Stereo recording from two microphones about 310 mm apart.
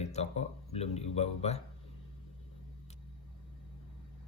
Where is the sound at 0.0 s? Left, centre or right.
Left.